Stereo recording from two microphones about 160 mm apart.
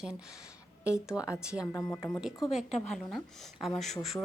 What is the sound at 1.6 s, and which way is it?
Speech, 15° left (ahead or behind).